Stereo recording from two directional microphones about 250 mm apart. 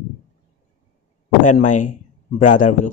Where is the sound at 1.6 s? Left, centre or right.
Left.